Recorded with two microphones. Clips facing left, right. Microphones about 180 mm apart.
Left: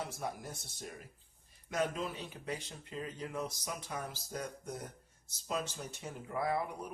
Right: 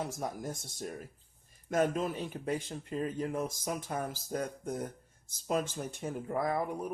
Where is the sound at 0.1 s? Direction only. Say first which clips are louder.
Right 4 dB; 40° right (ahead or behind).